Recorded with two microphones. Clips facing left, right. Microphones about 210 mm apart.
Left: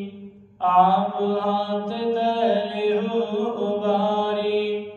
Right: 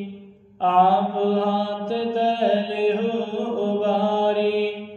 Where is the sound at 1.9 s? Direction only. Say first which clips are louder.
Right 1 dB; 25° right (ahead or behind).